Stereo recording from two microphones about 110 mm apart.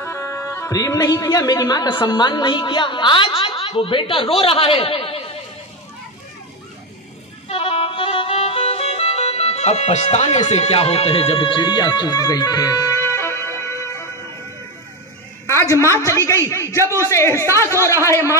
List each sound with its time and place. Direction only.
0.0 s a woman's voice: 25° left (ahead or behind); by 5.2 s 60° left (ahead or behind)
7.4 s music: 65° left (ahead or behind); by 14.0 s 25° left (ahead or behind)
15.7 s a woman's voice: 25° left (ahead or behind)